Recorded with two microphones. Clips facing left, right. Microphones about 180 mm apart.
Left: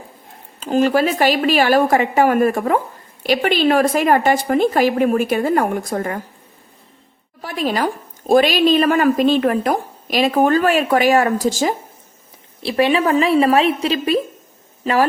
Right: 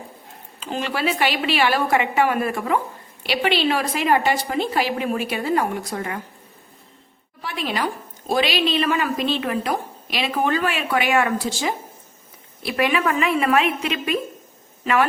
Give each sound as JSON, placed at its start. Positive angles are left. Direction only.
{"t": 0.6, "sound": "speech", "side_deg": 45}
{"t": 7.4, "sound": "speech", "side_deg": 40}
{"t": 12.6, "sound": "a woman's voice", "side_deg": 30}